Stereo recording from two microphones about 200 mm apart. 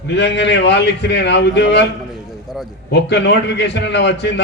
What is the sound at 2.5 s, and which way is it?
Speech, centre (ahead or behind).